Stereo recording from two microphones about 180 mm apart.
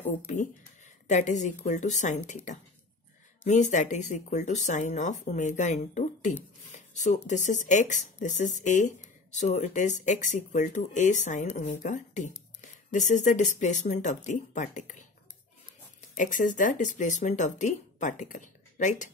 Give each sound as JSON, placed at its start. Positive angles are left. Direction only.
{"t": 1.0, "sound": "speech", "side_deg": 40}
{"t": 3.4, "sound": "speech", "side_deg": 40}
{"t": 16.2, "sound": "speech", "side_deg": 45}